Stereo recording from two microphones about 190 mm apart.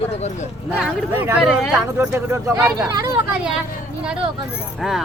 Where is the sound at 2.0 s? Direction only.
15° right (ahead or behind).